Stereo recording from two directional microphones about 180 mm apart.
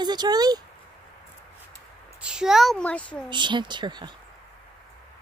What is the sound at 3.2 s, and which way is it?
Speech, 25° right (ahead or behind).